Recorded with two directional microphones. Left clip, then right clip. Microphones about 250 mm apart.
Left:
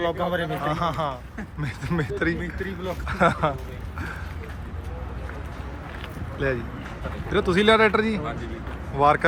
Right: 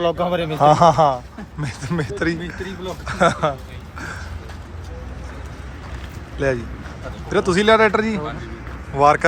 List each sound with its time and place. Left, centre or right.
0.0 s a man's voice: right
0.6 s speech: centre
3.9 s a sound: centre
7.3 s speech: centre